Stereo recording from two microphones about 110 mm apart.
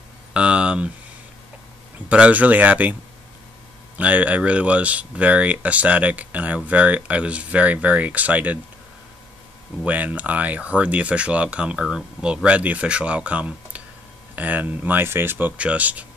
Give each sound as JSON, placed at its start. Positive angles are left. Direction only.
{"t": 0.3, "sound": "a sound", "side_deg": -10}
{"t": 2.0, "sound": "speech", "side_deg": -15}
{"t": 4.0, "sound": "speech", "side_deg": -15}
{"t": 9.8, "sound": "speech", "side_deg": -15}